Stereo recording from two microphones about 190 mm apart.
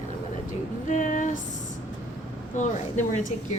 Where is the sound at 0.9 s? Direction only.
40° left (ahead or behind).